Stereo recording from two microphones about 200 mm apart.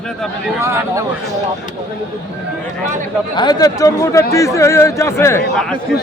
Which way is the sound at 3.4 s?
20° left (ahead or behind).